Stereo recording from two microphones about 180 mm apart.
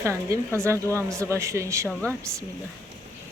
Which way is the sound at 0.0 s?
15° right (ahead or behind).